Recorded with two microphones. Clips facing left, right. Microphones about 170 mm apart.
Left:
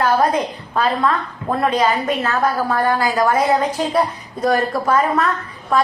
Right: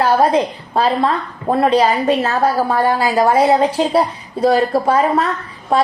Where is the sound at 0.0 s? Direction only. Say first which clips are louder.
Right 3 dB; 30° right (ahead or behind).